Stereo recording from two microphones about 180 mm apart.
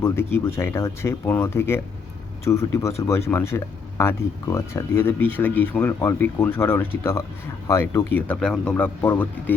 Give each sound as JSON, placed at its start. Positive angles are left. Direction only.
{"t": 0.0, "sound": "speech", "side_deg": 15}